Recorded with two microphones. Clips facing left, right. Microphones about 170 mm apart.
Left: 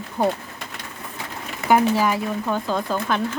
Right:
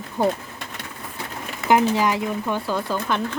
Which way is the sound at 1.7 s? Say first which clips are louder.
Even; 15° right (ahead or behind).